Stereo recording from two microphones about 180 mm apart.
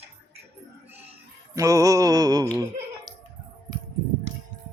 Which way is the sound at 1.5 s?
20° right (ahead or behind).